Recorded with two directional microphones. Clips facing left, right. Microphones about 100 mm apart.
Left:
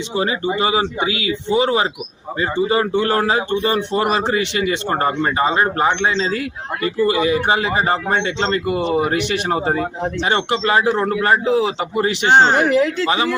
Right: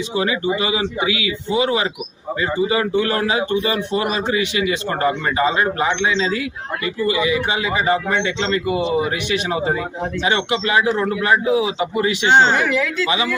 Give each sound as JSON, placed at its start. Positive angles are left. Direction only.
{"t": 0.1, "sound": "a man's voice", "side_deg": 35}